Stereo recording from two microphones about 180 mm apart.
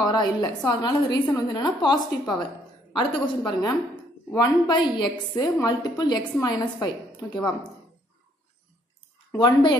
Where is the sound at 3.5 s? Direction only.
20° left (ahead or behind).